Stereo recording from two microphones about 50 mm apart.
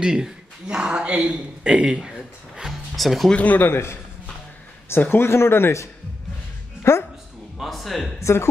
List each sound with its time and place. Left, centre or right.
0.0 s speech: centre
3.0 s speech: centre
3.3 s speech: left
3.7 s speech: left
7.5 s speech: centre
8.2 s speech: left